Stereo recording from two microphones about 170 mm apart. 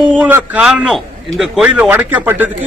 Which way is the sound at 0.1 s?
10° right (ahead or behind).